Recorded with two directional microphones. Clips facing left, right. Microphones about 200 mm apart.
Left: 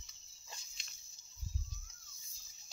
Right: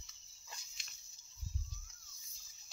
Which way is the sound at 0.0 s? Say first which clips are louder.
Right 1 dB; 25° left (ahead or behind).